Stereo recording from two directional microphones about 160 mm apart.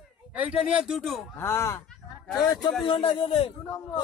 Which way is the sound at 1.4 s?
15° left (ahead or behind).